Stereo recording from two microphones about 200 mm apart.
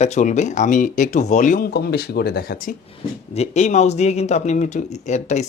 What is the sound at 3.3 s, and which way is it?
Speech, 35° left (ahead or behind).